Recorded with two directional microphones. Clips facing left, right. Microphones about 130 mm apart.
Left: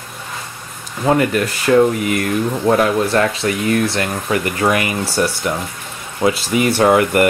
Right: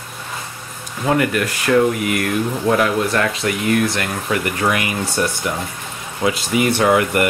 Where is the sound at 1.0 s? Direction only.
30° left (ahead or behind).